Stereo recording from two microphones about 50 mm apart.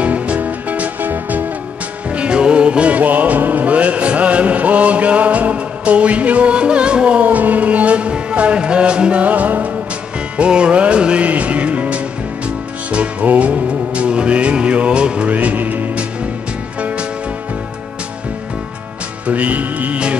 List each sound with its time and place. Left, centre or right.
0.0 s music: right
2.0 s music: right
19.2 s music: right